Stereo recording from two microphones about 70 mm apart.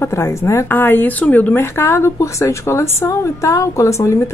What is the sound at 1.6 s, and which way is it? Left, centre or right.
A woman's voice, left.